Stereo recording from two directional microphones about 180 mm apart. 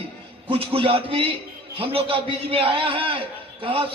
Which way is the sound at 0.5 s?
30° right (ahead or behind).